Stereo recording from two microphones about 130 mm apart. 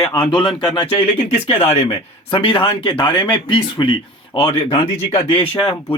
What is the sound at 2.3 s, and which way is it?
Speech, 40° left (ahead or behind).